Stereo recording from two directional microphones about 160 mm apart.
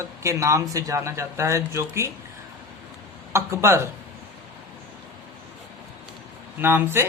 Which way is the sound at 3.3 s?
15° right (ahead or behind).